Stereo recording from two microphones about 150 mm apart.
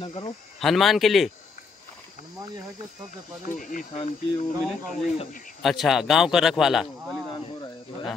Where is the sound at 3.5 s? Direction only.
60° left (ahead or behind).